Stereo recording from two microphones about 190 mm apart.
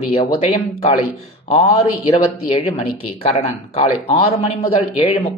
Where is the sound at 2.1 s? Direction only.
30° left (ahead or behind).